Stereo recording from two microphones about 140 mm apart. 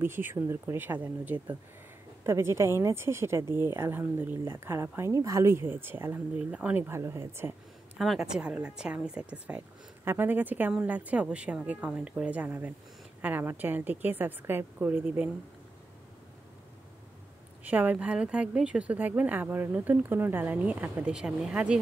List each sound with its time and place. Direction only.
0.0 s speech: 15° right (ahead or behind)
8.0 s speech: centre (ahead or behind)
17.6 s speech: 10° right (ahead or behind)